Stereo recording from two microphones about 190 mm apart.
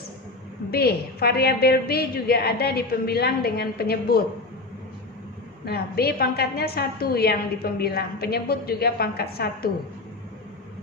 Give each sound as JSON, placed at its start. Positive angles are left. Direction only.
{"t": 0.7, "sound": "a woman's voice", "side_deg": 55}
{"t": 5.6, "sound": "a woman's voice", "side_deg": 55}